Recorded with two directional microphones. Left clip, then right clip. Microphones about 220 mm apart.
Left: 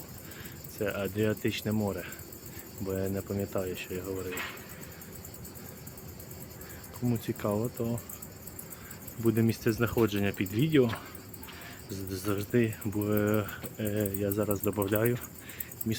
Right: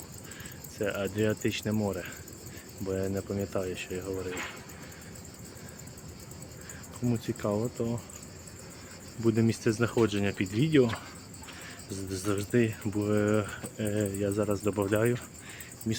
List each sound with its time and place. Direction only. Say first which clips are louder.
0.8 s speech: right 1 dB; 5° right (ahead or behind)
4.3 s speech: even; 45° left (ahead or behind)
7.1 s speech: right 1 dB; centre (ahead or behind)
9.2 s speech: right 1 dB; centre (ahead or behind)